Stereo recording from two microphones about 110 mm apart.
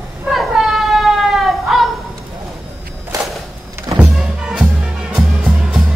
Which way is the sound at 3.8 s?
20° right (ahead or behind).